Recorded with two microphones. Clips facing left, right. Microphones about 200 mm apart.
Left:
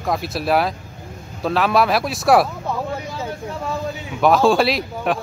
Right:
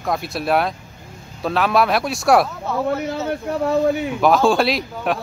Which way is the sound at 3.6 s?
65° right (ahead or behind).